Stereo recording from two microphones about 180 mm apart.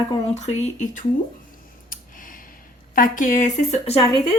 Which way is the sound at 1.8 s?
50° left (ahead or behind).